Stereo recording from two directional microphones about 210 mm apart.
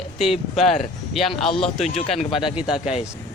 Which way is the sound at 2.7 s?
30° left (ahead or behind).